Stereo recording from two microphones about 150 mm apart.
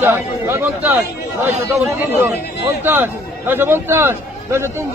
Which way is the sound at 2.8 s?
15° right (ahead or behind).